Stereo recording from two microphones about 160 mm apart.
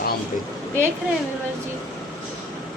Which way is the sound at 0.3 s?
55° left (ahead or behind).